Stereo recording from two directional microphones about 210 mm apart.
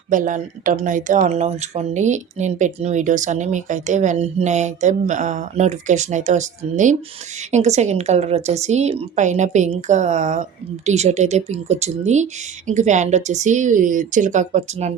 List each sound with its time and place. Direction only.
0.1 s speech: 40° right (ahead or behind)